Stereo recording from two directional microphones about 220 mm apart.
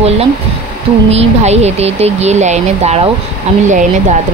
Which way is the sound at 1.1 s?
30° right (ahead or behind).